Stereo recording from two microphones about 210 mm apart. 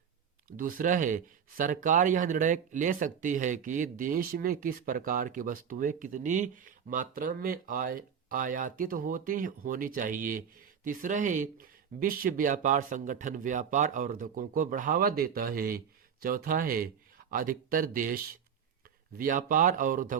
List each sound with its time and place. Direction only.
0.5 s speech: 40° right (ahead or behind)